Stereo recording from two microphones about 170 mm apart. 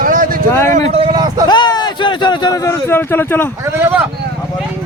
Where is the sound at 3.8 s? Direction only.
10° right (ahead or behind).